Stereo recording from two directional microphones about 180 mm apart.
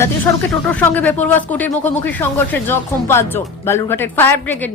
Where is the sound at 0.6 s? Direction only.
10° left (ahead or behind).